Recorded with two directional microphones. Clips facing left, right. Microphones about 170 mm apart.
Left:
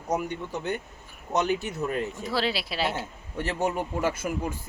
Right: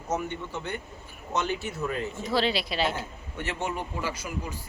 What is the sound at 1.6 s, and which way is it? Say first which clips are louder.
Speech: left 2 dB; 20° left (ahead or behind).